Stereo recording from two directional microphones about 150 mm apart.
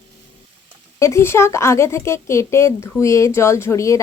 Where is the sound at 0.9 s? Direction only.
20° left (ahead or behind).